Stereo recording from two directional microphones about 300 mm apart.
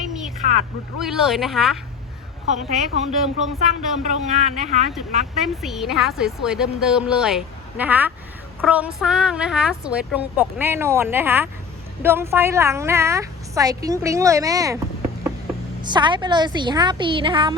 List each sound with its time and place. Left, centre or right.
0.9 s a woman's voice: centre
2.6 s speech: right
5.6 s a woman's voice: centre
15.8 s a woman's voice: centre